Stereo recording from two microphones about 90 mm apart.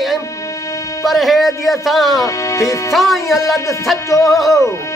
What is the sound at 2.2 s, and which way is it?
Music, 35° left (ahead or behind).